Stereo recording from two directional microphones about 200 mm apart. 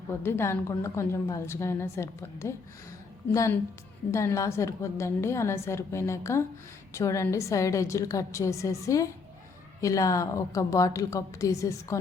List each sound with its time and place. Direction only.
0.1 s a woman's voice: 10° left (ahead or behind)